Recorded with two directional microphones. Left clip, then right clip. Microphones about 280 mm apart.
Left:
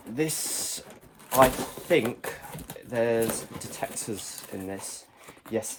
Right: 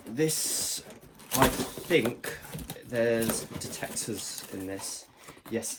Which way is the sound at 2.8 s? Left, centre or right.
Left.